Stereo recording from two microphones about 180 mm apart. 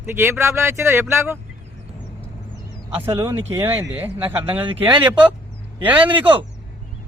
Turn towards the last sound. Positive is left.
turn(degrees=-10)  # may be behind; listen again after turning